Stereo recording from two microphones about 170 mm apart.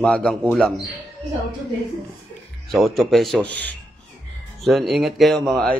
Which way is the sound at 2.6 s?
Centre (ahead or behind).